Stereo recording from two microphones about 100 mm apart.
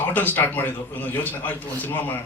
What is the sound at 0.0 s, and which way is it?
A man's voice, 20° left (ahead or behind).